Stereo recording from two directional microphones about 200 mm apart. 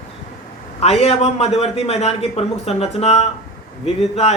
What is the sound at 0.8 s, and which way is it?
A man's voice, 30° left (ahead or behind).